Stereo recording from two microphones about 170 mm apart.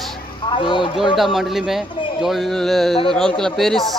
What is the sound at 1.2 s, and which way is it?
Speech, centre (ahead or behind).